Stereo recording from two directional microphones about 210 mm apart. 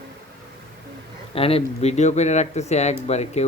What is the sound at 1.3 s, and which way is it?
Speech, 25° left (ahead or behind).